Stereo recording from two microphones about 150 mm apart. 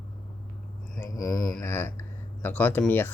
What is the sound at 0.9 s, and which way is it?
Speech, 20° left (ahead or behind).